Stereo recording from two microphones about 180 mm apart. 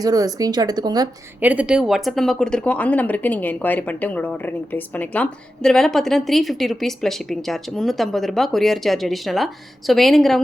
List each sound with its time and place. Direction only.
0.0 s speech: 20° right (ahead or behind)
1.4 s speech: 10° right (ahead or behind)